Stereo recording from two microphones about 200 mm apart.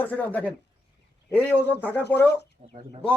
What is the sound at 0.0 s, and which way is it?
Speech, 10° left (ahead or behind).